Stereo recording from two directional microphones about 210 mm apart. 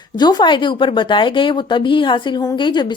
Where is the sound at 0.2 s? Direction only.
20° left (ahead or behind).